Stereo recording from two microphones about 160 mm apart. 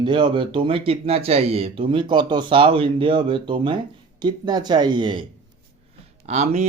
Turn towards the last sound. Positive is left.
turn(degrees=-45)  # may be behind; listen again after turning